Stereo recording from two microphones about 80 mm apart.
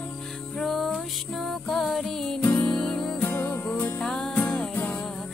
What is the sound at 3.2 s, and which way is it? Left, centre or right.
Music, left.